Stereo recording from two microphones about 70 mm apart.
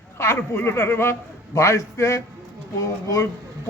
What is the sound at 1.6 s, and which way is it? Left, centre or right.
Speech, left.